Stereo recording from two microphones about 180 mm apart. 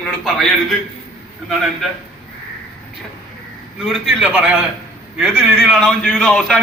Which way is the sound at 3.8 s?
Centre (ahead or behind).